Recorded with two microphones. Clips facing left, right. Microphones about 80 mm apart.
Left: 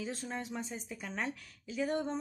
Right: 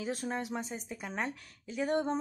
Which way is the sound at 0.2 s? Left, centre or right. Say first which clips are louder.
Right 5 dB; right.